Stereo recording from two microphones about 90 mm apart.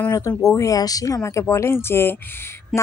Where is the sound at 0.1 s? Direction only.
40° left (ahead or behind).